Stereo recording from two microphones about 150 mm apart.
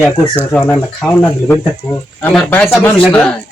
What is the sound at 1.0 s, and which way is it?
Speech, centre (ahead or behind).